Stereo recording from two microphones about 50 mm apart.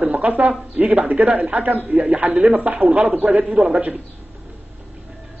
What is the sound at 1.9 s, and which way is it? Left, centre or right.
A man's voice, right.